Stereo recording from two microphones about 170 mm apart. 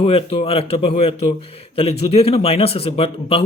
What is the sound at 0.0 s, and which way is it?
Speech, 35° left (ahead or behind).